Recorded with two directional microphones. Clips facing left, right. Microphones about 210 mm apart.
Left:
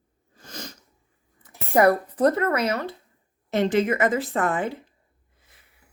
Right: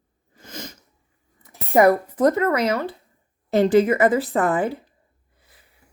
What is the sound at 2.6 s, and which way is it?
A woman's voice, 30° right (ahead or behind).